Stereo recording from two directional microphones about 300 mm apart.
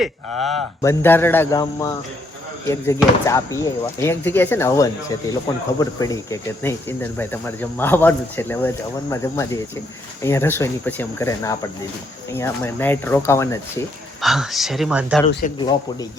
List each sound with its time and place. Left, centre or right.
0.0 s speech: centre
15.3 s speech: left
15.5 s speech: centre